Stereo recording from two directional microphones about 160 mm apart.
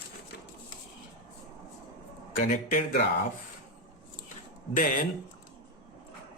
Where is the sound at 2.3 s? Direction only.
60° left (ahead or behind).